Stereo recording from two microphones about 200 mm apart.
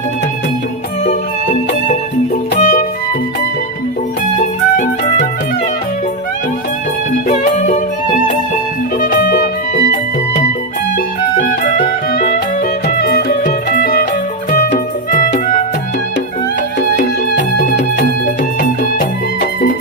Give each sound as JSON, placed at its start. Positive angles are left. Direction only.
{"t": 1.0, "sound": "music", "side_deg": 35}
{"t": 4.4, "sound": "music", "side_deg": 40}
{"t": 7.3, "sound": "music", "side_deg": 35}
{"t": 9.0, "sound": "music", "side_deg": 50}
{"t": 10.9, "sound": "music", "side_deg": 45}
{"t": 15.1, "sound": "music", "side_deg": 40}
{"t": 17.0, "sound": "music", "side_deg": 40}